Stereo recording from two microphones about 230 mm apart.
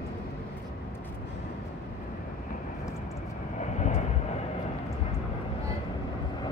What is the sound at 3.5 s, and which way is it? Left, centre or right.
Vehicle, left.